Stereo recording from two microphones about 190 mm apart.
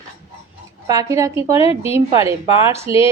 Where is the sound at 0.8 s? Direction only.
15° right (ahead or behind).